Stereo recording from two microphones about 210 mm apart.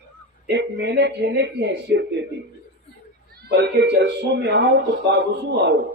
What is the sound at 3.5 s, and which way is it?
Speech, 50° right (ahead or behind).